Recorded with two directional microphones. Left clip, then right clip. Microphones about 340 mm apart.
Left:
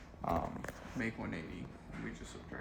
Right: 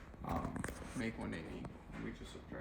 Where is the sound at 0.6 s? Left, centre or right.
Centre.